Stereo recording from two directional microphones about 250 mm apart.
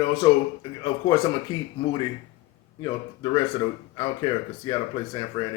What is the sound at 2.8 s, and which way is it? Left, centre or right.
Speech, centre.